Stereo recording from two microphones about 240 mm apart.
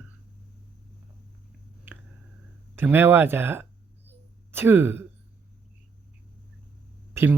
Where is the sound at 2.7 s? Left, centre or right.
Centre.